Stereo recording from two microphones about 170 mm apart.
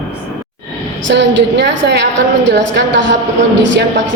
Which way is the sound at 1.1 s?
90° right.